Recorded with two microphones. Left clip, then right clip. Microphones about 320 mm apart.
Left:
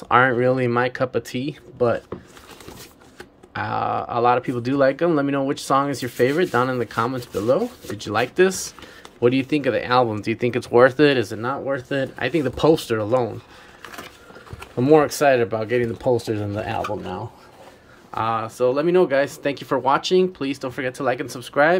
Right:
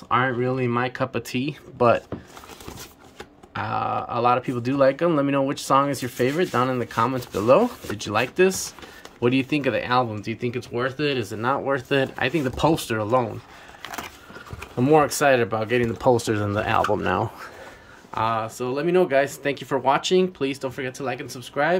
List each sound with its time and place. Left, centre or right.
0.1 s speech: centre
3.5 s speech: centre
14.6 s speech: centre
16.8 s speech: right
18.1 s speech: centre